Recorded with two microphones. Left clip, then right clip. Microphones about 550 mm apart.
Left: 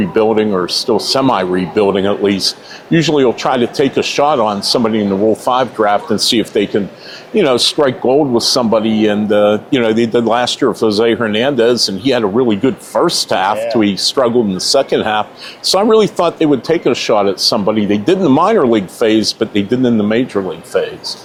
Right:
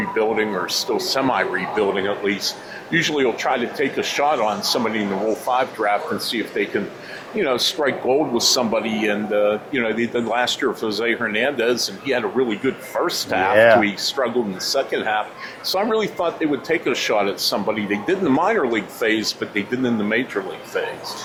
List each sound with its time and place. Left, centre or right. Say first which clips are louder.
0.1 s speech: left 8 dB; left